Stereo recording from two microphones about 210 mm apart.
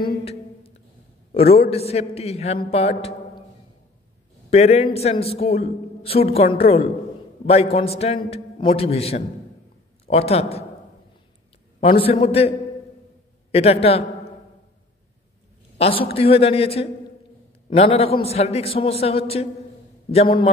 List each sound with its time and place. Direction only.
0.0 s a sound: 25° left (ahead or behind)
1.3 s a man's voice: 30° left (ahead or behind)
4.5 s a man's voice: 30° left (ahead or behind)
11.8 s a man's voice: 25° left (ahead or behind)
15.8 s a man's voice: 25° left (ahead or behind)